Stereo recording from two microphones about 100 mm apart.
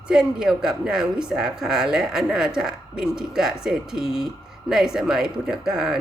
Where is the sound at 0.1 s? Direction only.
5° right (ahead or behind).